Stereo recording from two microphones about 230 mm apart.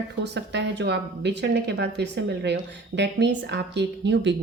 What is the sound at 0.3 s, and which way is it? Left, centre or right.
Speech, right.